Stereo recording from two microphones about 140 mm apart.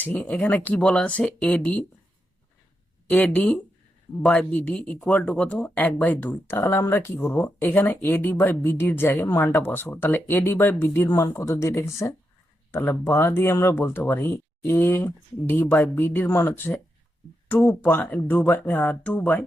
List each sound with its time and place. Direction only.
0.0 s speech: 10° left (ahead or behind)
3.1 s speech: 10° left (ahead or behind)